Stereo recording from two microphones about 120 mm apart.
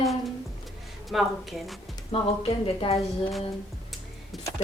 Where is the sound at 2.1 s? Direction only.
55° left (ahead or behind).